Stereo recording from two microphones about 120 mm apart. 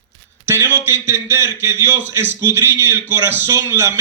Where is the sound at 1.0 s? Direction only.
20° right (ahead or behind).